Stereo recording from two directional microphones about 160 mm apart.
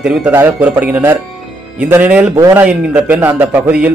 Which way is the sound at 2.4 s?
20° right (ahead or behind).